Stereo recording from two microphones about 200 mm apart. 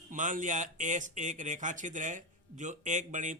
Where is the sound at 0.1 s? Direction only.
40° right (ahead or behind).